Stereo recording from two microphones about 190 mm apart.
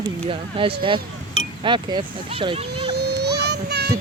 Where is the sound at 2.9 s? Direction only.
60° right (ahead or behind).